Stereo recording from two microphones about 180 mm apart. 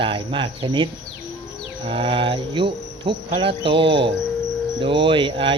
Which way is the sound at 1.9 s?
30° right (ahead or behind).